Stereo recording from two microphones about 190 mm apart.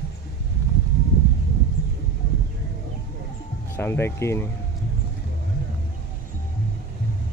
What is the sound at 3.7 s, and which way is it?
Speech, 15° left (ahead or behind).